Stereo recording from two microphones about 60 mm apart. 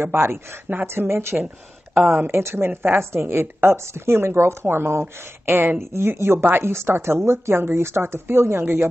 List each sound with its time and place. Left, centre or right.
0.0 s speech: right